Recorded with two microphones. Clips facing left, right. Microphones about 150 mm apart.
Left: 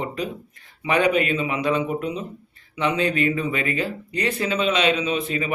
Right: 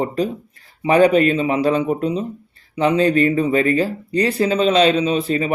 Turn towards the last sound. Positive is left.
turn(degrees=-35)  # may be behind; listen again after turning